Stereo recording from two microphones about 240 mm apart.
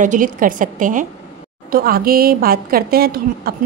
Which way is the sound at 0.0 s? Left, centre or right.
Right.